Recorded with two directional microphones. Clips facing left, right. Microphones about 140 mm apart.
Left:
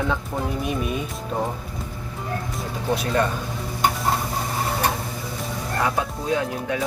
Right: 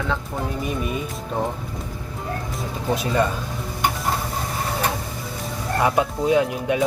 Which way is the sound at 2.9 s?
Centre (ahead or behind).